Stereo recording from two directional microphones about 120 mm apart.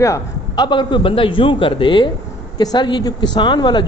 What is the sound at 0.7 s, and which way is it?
A man's voice, 40° left (ahead or behind).